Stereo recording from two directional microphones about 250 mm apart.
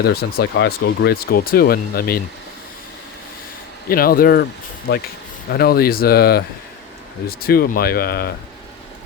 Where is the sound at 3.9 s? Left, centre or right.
Left.